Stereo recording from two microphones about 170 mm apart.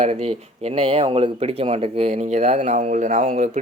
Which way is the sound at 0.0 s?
40° right (ahead or behind).